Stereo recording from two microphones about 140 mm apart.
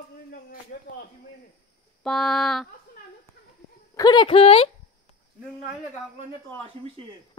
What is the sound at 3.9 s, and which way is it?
Speech, 30° left (ahead or behind).